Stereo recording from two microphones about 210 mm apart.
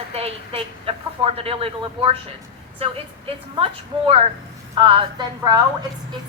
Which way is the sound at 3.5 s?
25° right (ahead or behind).